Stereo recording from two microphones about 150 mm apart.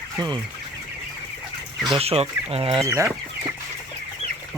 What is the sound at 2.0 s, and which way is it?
Speech, 40° right (ahead or behind).